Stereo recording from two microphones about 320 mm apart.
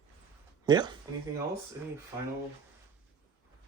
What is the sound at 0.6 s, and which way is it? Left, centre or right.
Speech, centre.